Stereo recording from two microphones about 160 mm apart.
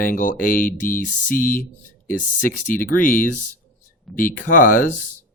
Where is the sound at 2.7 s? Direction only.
60° left (ahead or behind).